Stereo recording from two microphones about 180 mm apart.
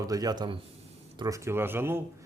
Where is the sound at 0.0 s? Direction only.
20° right (ahead or behind).